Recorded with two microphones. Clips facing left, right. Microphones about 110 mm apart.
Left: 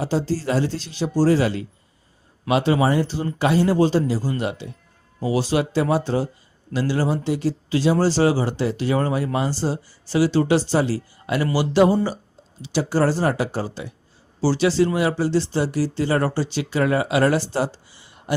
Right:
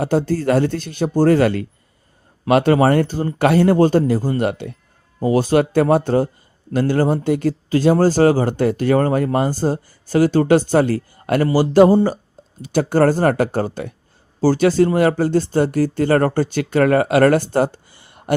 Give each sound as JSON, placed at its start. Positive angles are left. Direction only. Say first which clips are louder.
{"t": 0.0, "sound": "speech", "louder": "right 5 dB", "side_deg": -55}